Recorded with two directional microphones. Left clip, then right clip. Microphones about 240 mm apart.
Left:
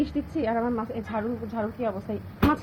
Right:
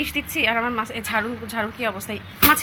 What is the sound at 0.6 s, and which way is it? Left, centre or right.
Speech, centre.